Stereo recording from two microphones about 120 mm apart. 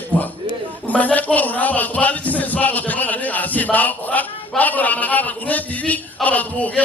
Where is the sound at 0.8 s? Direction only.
15° left (ahead or behind).